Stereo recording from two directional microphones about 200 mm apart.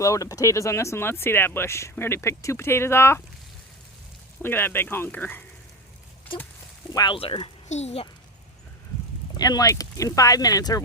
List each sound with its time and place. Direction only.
0.0 s speech: 15° left (ahead or behind)
4.4 s speech: 10° left (ahead or behind)
6.2 s a sound: 10° left (ahead or behind)
6.9 s a child's voice: 20° left (ahead or behind)
9.4 s speech: 20° left (ahead or behind)